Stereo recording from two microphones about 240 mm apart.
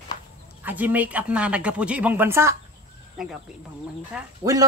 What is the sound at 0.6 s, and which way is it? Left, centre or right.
Speech, centre.